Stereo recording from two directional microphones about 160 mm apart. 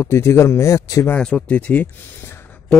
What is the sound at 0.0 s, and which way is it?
Speech, 15° left (ahead or behind).